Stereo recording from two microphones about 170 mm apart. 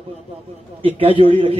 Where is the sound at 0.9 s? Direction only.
30° right (ahead or behind).